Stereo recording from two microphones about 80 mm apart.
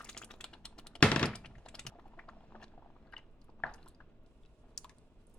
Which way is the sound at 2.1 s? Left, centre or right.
Centre.